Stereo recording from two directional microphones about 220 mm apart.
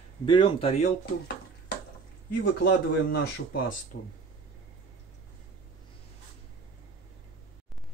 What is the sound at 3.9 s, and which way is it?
Speech, 45° left (ahead or behind).